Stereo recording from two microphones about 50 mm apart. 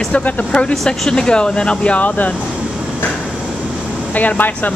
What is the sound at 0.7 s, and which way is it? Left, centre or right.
Speech, centre.